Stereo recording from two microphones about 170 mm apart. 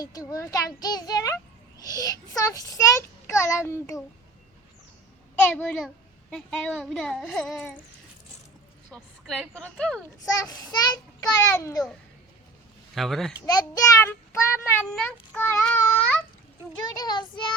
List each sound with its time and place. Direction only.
0.0 s a child's voice: 20° left (ahead or behind)
5.5 s a child's voice: 10° left (ahead or behind)
8.9 s speech: 5° left (ahead or behind)
10.3 s a child's voice: 20° left (ahead or behind)
12.9 s speech: centre (ahead or behind)
13.4 s a child's voice: 20° left (ahead or behind)
16.9 s a child's voice: 25° left (ahead or behind)